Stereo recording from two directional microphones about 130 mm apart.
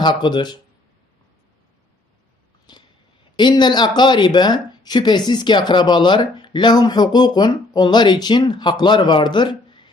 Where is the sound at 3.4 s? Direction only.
35° left (ahead or behind).